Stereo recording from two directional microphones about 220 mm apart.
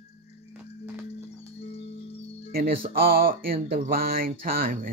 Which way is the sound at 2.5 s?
40° right (ahead or behind).